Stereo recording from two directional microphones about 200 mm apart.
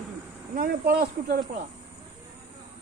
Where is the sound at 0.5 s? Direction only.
45° right (ahead or behind).